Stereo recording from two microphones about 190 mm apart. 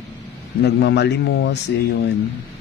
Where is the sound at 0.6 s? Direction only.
65° left (ahead or behind).